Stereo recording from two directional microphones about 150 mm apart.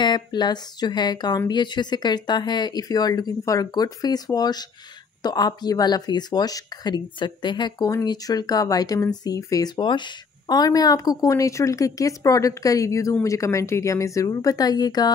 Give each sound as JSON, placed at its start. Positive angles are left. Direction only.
{"t": 0.0, "sound": "speech", "side_deg": 30}